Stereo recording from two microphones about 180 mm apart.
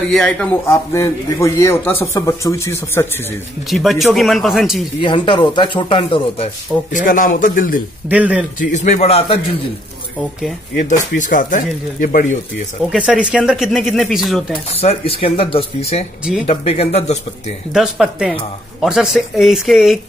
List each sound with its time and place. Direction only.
0.1 s a man's voice: 5° left (ahead or behind)
3.7 s speech: centre (ahead or behind)
5.0 s speech: 25° left (ahead or behind)
6.9 s speech: 45° left (ahead or behind)
8.1 s speech: 10° right (ahead or behind)
8.5 s speech: 40° left (ahead or behind)
10.9 s speech: 45° left (ahead or behind)
12.9 s speech: 5° right (ahead or behind)
14.7 s speech: 35° left (ahead or behind)
17.7 s speech: 5° right (ahead or behind)